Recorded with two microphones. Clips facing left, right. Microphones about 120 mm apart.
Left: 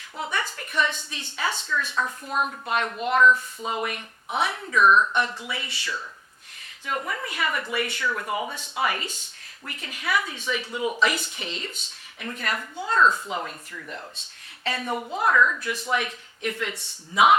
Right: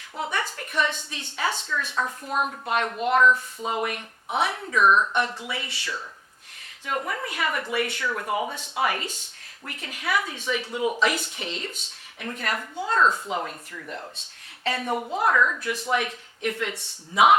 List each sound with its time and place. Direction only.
0.2 s a woman's voice: 45° right (ahead or behind)
2.0 s speech: 35° right (ahead or behind)
2.6 s a woman's voice: 50° right (ahead or behind)
4.9 s speech: 20° right (ahead or behind)
5.4 s a woman's voice: 50° right (ahead or behind)
8.0 s a woman's voice: 40° right (ahead or behind); by 11.8 s 55° right (ahead or behind)
12.2 s a woman's voice: 45° right (ahead or behind)
13.0 s speech: 25° right (ahead or behind)
13.3 s speech: 40° right (ahead or behind)
15.6 s a woman's voice: 55° right (ahead or behind)